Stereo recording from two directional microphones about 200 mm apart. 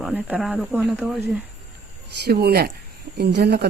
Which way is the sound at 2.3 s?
50° right (ahead or behind).